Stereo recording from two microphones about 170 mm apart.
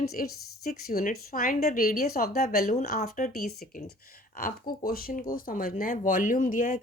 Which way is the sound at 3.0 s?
50° left (ahead or behind).